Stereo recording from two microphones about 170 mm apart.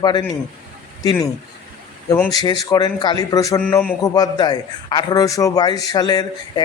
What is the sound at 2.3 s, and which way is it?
A man's voice, 25° left (ahead or behind).